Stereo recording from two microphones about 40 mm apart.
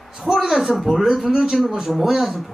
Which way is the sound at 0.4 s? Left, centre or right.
Centre.